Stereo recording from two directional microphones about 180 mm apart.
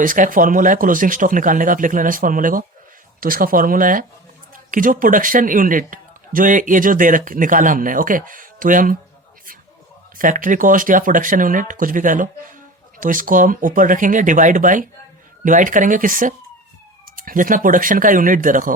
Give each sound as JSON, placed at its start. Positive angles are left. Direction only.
{"t": 0.0, "sound": "a man's voice", "side_deg": -50}
{"t": 10.2, "sound": "a man's voice", "side_deg": -45}